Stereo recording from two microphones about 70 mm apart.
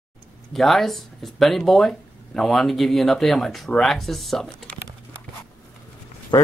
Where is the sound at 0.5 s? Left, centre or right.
Centre.